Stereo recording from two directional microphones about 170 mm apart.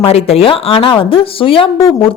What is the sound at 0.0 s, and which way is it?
A woman's voice, 35° left (ahead or behind).